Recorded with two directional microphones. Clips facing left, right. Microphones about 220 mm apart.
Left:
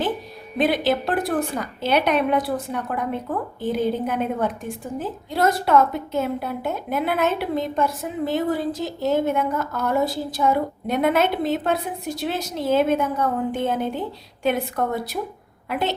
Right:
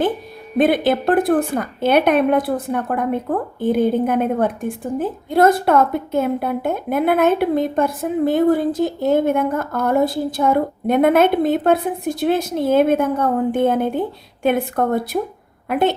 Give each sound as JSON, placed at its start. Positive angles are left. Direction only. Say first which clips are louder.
{"t": 0.5, "sound": "a woman's voice", "louder": "right 5 dB", "side_deg": -50}